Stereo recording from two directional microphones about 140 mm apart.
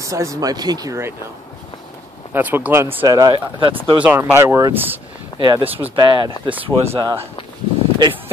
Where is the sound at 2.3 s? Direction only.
15° right (ahead or behind).